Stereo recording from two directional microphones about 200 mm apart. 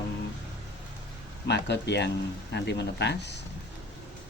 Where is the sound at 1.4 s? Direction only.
60° left (ahead or behind).